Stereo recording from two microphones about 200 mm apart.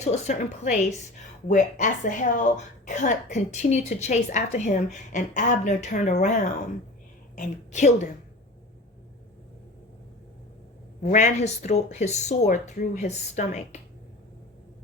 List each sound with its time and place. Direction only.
0.0 s speech: 35° left (ahead or behind)
11.0 s speech: 35° left (ahead or behind)